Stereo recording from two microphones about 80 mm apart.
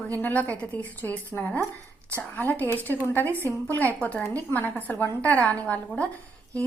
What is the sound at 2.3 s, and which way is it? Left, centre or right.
A woman's voice, left.